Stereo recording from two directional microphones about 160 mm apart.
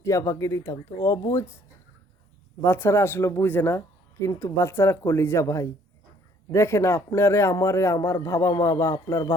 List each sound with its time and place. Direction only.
0.0 s speech: 20° left (ahead or behind)
2.6 s speech: 15° left (ahead or behind)